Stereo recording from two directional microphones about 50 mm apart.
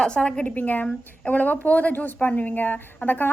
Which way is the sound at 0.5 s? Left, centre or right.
Left.